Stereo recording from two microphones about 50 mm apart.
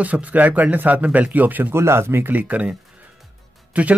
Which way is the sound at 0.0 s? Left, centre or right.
Right.